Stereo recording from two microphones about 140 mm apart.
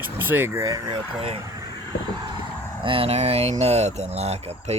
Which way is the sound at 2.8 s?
40° right (ahead or behind).